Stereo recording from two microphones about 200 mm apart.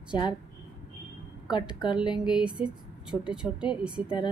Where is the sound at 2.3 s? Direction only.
5° right (ahead or behind).